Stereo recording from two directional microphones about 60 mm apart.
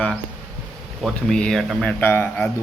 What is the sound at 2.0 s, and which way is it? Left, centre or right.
Speech, left.